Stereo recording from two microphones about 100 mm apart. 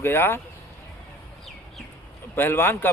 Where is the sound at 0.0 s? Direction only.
25° left (ahead or behind).